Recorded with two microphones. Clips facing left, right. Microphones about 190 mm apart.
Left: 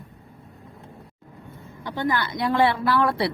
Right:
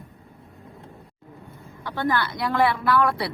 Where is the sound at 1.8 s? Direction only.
15° left (ahead or behind).